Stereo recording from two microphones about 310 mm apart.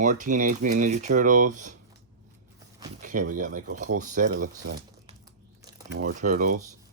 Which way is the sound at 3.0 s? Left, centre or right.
Right.